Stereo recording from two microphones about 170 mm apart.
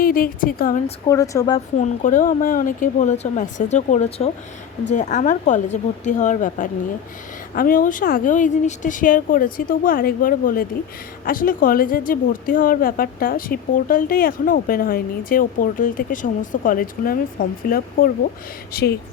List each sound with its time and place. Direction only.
0.0 s speech: 55° left (ahead or behind)
1.0 s speech: 20° left (ahead or behind)
1.5 s speech: 45° left (ahead or behind)
18.7 s speech: 70° left (ahead or behind)